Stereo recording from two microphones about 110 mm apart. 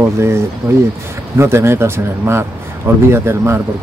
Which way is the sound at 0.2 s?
25° right (ahead or behind).